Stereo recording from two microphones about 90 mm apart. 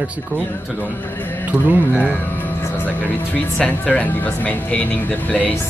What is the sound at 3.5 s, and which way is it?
Speech, 15° left (ahead or behind).